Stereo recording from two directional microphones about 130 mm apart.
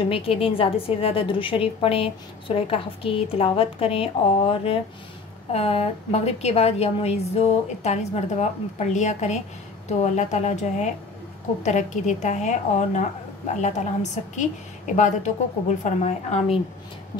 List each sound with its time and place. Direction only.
0.0 s a woman's voice: 45° left (ahead or behind); by 15.3 s 70° left (ahead or behind)
15.8 s a woman's voice: 60° left (ahead or behind)